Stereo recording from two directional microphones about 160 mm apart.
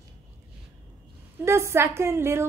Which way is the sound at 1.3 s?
15° right (ahead or behind).